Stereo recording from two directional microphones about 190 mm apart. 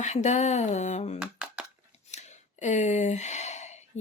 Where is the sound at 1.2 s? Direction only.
5° right (ahead or behind).